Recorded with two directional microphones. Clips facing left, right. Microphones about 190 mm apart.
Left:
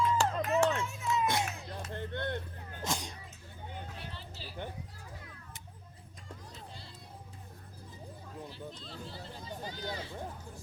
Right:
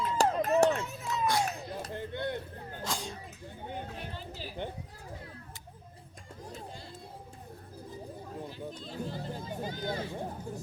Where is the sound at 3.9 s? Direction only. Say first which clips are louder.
Right 5 dB; 50° right (ahead or behind).